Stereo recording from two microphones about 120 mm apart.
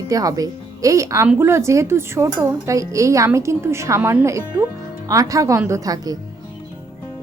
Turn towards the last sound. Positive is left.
turn(degrees=-30)  # may be behind; listen again after turning